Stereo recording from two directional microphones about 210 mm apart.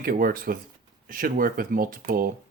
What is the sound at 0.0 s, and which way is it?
Speech, 45° right (ahead or behind).